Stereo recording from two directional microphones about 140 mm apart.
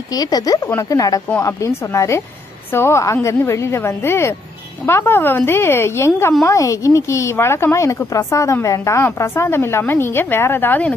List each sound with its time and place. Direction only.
0.1 s a woman's voice: 25° left (ahead or behind)